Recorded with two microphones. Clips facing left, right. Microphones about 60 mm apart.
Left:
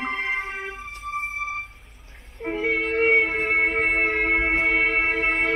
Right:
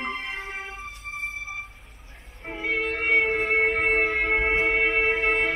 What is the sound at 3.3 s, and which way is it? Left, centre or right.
Music, centre.